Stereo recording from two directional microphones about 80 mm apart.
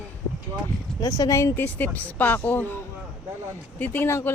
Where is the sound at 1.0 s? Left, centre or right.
Left.